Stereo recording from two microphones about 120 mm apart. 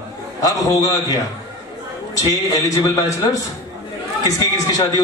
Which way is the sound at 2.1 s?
30° left (ahead or behind).